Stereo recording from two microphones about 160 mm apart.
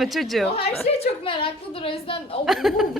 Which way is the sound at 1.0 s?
35° left (ahead or behind).